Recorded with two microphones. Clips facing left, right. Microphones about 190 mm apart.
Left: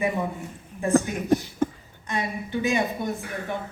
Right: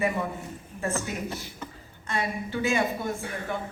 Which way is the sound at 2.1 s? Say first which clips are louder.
Left 1 dB; 20° left (ahead or behind).